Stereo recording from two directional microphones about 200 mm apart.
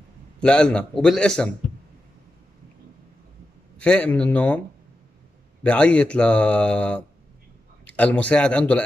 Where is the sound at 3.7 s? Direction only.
5° left (ahead or behind).